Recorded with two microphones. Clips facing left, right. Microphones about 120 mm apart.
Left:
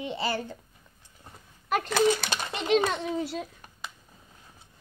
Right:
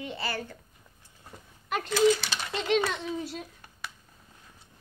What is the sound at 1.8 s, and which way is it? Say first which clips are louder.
Speech: right 2 dB; 55° left (ahead or behind).